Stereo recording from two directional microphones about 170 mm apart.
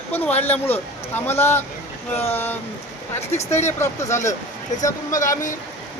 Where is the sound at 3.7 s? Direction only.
15° left (ahead or behind).